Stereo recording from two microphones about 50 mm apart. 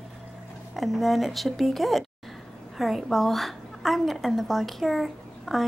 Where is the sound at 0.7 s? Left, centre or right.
Centre.